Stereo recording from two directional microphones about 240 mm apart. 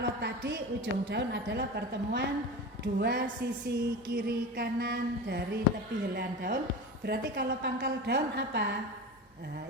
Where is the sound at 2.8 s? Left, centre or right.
Right.